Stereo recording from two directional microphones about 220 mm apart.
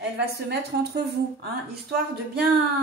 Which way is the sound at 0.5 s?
45° right (ahead or behind).